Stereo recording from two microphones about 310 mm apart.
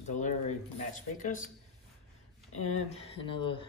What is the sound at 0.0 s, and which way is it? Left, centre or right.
Speech, left.